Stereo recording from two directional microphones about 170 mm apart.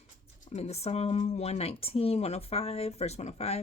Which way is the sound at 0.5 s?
40° left (ahead or behind).